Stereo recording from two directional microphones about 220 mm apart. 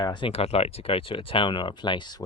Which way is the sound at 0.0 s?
20° left (ahead or behind).